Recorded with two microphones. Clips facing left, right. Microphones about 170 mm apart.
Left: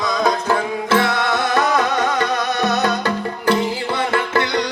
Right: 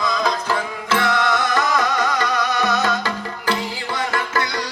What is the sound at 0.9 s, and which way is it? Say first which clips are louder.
Music: even; 55° left (ahead or behind).